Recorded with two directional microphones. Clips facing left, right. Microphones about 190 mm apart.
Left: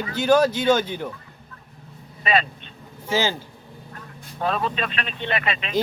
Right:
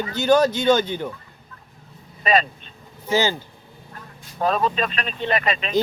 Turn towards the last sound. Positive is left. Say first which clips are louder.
# right 3 dB
turn(degrees=-40)  # may be behind; listen again after turning